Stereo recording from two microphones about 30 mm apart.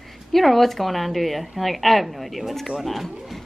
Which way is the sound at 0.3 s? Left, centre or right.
Centre.